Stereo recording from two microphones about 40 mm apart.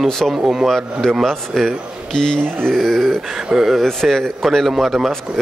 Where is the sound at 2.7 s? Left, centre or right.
Centre.